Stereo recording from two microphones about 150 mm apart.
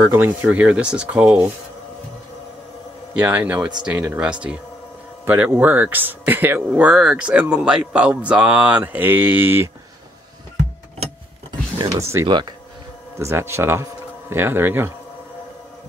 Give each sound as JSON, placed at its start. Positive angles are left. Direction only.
{"t": 0.0, "sound": "speech", "side_deg": -15}
{"t": 3.2, "sound": "speech", "side_deg": -10}
{"t": 11.8, "sound": "speech", "side_deg": -20}